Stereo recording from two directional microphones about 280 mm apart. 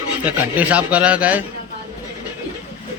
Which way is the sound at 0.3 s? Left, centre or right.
Centre.